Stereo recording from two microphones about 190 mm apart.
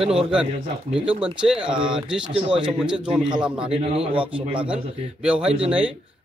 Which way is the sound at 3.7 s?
30° right (ahead or behind).